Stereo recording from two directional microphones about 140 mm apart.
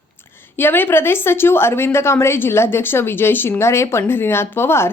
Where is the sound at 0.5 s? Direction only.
15° left (ahead or behind).